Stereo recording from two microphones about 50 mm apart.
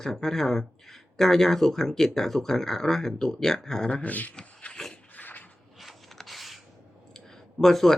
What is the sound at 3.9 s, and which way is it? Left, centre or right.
Speech, left.